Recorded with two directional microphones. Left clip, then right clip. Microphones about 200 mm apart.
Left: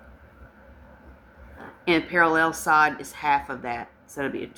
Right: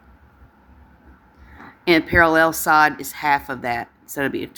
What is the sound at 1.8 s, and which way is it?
Speech, 50° right (ahead or behind).